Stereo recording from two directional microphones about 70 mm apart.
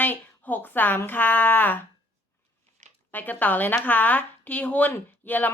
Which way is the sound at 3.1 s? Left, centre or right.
Left.